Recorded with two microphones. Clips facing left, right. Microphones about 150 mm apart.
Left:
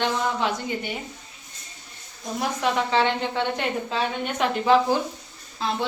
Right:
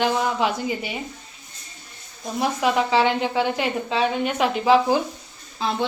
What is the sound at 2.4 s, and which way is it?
A woman's voice, 5° right (ahead or behind).